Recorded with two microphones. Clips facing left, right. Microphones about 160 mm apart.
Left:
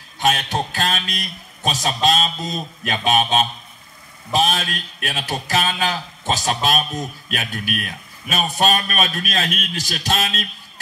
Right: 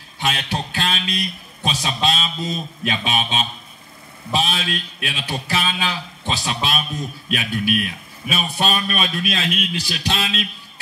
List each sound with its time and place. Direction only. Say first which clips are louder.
0.2 s a man's voice: left 4 dB; 45° left (ahead or behind)